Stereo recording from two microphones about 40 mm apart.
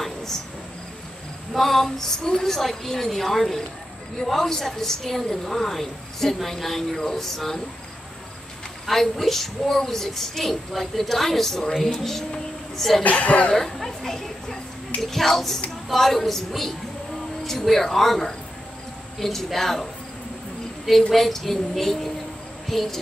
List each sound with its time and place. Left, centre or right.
0.0 s cricket: centre
1.5 s a child's voice: centre
8.8 s a child's voice: centre
13.0 s speech: left
13.6 s a child's voice: centre
21.1 s a child's voice: centre